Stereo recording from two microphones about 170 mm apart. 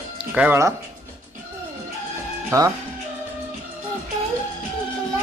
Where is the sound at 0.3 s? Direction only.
10° right (ahead or behind).